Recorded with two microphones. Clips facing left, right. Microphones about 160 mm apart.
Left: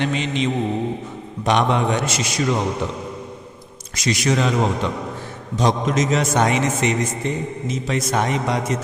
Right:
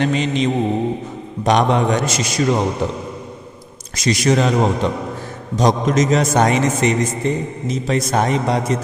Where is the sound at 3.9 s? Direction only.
35° right (ahead or behind).